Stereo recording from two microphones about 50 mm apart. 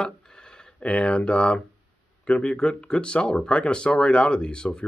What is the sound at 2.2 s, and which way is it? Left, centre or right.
Speech, left.